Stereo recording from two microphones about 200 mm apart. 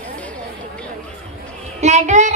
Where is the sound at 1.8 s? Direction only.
35° right (ahead or behind).